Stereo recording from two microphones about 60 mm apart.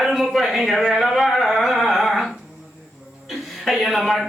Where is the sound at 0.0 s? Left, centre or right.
Centre.